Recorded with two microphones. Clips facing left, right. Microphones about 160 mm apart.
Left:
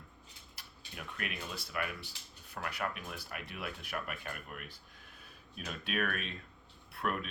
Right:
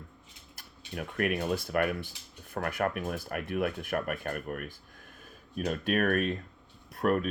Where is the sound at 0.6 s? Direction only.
45° right (ahead or behind).